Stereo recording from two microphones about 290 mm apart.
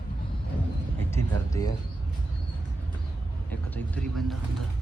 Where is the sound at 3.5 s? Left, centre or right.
Centre.